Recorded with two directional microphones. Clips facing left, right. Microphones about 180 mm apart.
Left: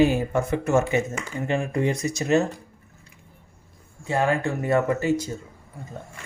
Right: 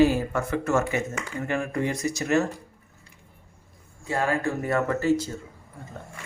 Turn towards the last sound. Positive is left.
turn(degrees=15)  # may be behind; listen again after turning